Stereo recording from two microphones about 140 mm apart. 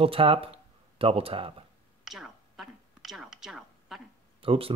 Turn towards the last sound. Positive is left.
turn(degrees=-40)  # may be behind; listen again after turning